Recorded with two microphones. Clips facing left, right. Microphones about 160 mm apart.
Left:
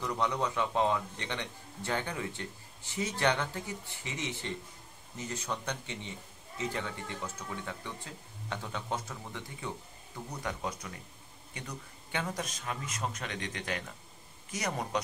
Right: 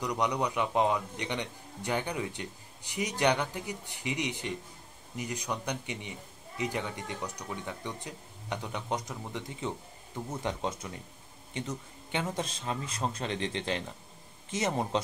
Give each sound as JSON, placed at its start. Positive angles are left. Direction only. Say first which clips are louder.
{"t": 0.0, "sound": "a man's voice", "louder": "right 2 dB", "side_deg": -15}